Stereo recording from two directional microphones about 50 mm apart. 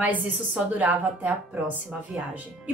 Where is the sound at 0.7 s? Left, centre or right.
Right.